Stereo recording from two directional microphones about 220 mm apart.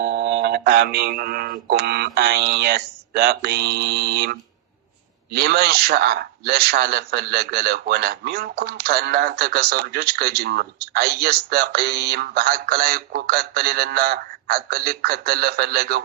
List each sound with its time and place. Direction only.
0.0 s speech: 50° right (ahead or behind)